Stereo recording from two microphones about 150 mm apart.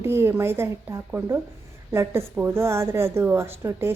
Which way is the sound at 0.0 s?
15° right (ahead or behind).